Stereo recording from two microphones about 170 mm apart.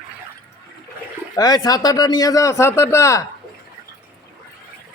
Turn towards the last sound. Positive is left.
turn(degrees=15)  # may be behind; listen again after turning